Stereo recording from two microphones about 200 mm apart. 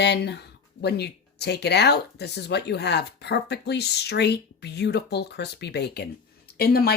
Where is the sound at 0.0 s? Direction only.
55° left (ahead or behind).